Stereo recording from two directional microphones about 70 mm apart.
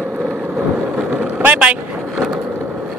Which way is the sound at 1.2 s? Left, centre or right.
Centre.